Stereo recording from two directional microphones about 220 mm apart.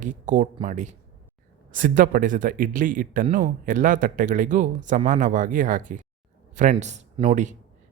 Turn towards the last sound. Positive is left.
turn(degrees=-35)  # may be behind; listen again after turning